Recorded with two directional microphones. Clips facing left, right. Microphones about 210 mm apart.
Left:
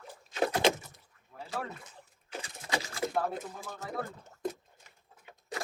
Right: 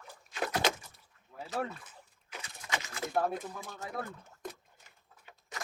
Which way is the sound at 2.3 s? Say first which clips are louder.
Left 4 dB; 30° left (ahead or behind).